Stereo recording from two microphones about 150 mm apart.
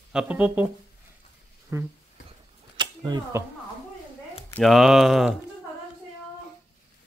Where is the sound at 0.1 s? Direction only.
5° right (ahead or behind).